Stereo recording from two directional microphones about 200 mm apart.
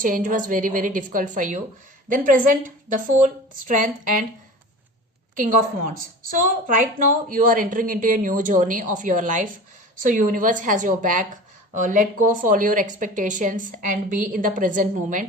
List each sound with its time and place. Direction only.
0.0 s a woman's voice: 40° right (ahead or behind)
5.3 s a woman's voice: 40° right (ahead or behind)